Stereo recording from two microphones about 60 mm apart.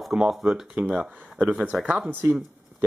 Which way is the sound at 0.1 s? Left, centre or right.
Centre.